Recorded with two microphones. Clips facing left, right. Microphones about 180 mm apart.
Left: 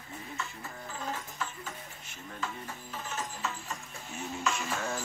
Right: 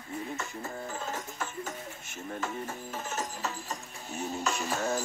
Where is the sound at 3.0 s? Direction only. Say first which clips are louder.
Right 1 dB; 45° right (ahead or behind).